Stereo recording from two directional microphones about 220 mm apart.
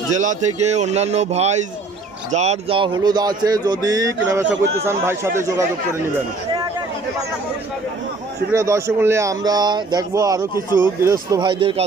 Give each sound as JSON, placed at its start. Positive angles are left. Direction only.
{"t": 0.1, "sound": "speech", "side_deg": -35}
{"t": 8.5, "sound": "speech", "side_deg": -15}